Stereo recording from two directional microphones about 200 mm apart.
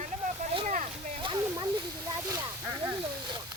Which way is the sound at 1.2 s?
20° right (ahead or behind).